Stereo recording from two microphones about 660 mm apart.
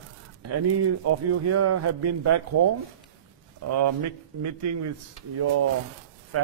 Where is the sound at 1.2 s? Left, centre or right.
Right.